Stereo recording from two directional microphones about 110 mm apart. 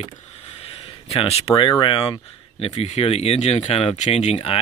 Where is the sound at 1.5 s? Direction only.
50° left (ahead or behind).